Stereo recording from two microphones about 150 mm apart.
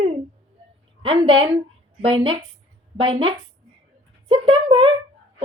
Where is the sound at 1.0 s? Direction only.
35° right (ahead or behind).